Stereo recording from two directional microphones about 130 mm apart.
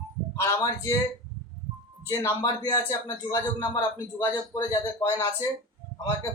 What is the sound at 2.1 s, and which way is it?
Speech, 25° left (ahead or behind).